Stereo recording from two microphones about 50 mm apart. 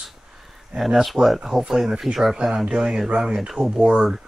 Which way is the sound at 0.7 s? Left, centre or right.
Centre.